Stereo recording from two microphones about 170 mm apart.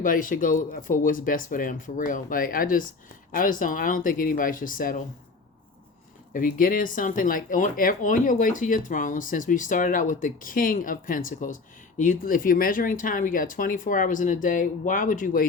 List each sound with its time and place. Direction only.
0.0 s speech: 55° left (ahead or behind)
6.3 s speech: 55° left (ahead or behind)